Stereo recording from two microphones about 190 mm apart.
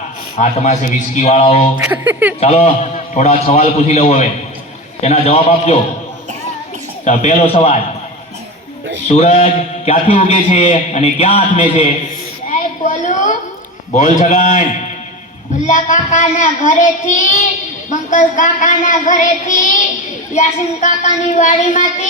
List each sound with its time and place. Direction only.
0.3 s a man's voice: 35° left (ahead or behind)
1.7 s speech: 10° right (ahead or behind)
2.4 s a man's voice: 35° left (ahead or behind)
7.0 s a man's voice: 35° left (ahead or behind)
9.0 s a man's voice: 35° left (ahead or behind)
12.5 s a sound: 40° left (ahead or behind)
13.9 s a man's voice: 40° left (ahead or behind)